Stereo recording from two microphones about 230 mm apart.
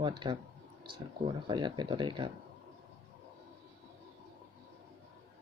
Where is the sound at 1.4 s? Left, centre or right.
Centre.